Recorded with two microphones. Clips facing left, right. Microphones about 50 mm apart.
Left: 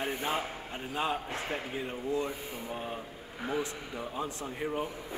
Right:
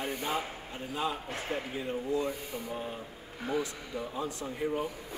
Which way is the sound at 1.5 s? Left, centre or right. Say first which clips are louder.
Right 4 dB; centre.